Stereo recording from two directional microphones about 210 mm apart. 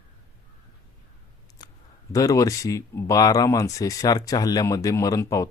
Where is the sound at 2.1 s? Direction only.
15° left (ahead or behind).